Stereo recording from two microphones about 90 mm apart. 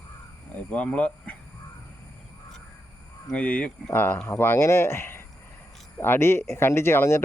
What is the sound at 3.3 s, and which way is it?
Speech, 15° left (ahead or behind).